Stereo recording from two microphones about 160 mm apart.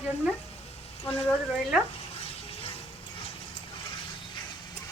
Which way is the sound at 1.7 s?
5° right (ahead or behind).